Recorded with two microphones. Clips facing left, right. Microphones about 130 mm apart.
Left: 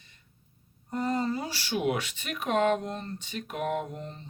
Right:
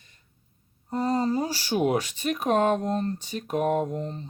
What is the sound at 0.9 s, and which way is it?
Speech, 30° right (ahead or behind).